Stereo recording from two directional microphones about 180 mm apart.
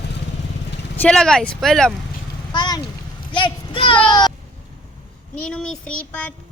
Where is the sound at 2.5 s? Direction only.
25° left (ahead or behind).